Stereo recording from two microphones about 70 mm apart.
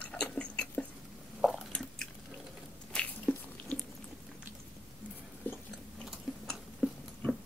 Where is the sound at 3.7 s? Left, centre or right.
Centre.